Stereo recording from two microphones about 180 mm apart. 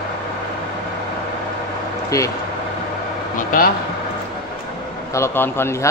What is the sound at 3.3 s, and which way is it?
Vehicle, 50° left (ahead or behind).